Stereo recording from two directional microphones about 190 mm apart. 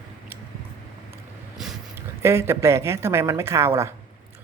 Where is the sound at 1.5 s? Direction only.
Centre (ahead or behind).